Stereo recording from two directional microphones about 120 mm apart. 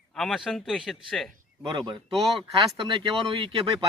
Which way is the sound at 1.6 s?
40° right (ahead or behind).